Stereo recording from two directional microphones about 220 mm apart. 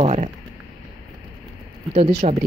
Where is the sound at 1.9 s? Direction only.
25° right (ahead or behind).